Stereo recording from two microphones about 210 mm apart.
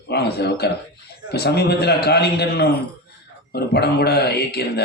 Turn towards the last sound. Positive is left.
turn(degrees=50)  # may be behind; listen again after turning